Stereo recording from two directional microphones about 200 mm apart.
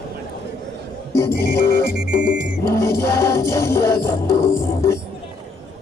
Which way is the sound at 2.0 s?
5° right (ahead or behind).